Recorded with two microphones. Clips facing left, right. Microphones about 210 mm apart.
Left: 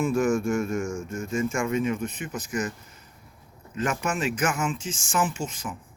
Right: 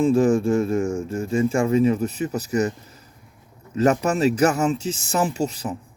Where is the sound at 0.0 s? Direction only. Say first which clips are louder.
Right 6 dB; 30° right (ahead or behind).